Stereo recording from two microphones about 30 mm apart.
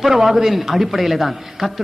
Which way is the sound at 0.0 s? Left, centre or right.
Centre.